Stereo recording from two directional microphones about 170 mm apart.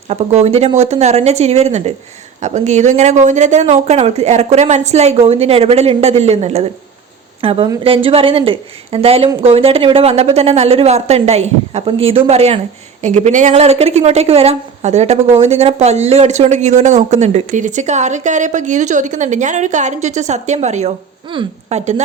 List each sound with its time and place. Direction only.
0.1 s a woman's voice: 40° right (ahead or behind)
21.3 s a woman's voice: 30° right (ahead or behind)
21.7 s a woman's voice: 40° right (ahead or behind)